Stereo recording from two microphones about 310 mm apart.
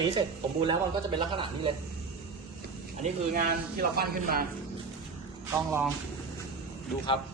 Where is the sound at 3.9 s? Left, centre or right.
Right.